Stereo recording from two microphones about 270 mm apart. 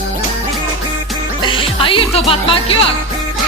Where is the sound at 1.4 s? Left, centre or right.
Centre.